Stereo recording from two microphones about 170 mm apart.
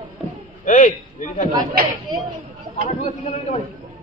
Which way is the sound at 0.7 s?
50° left (ahead or behind).